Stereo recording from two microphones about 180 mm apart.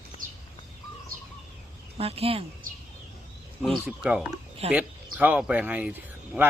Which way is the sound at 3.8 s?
5° right (ahead or behind).